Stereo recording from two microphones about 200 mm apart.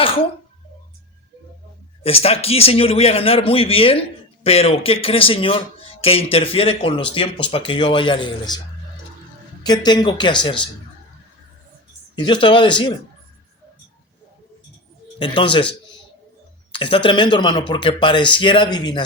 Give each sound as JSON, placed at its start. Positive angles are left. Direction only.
{"t": 0.0, "sound": "throat clearing", "side_deg": 25}
{"t": 2.0, "sound": "speech", "side_deg": 30}
{"t": 9.6, "sound": "speech", "side_deg": 20}
{"t": 12.1, "sound": "speech", "side_deg": 25}
{"t": 15.2, "sound": "speech", "side_deg": 25}
{"t": 16.7, "sound": "speech", "side_deg": 25}